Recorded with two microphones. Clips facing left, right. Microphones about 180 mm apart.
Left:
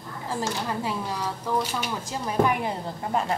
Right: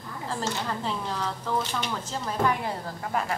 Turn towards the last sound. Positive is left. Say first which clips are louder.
# left 2 dB
turn(degrees=20)  # may be behind; listen again after turning